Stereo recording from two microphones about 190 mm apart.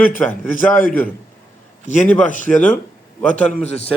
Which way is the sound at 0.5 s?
45° left (ahead or behind).